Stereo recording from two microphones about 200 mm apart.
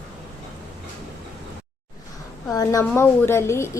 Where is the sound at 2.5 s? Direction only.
15° left (ahead or behind).